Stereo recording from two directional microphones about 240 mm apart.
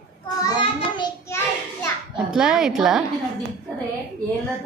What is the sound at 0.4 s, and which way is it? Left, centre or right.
Child singing, centre.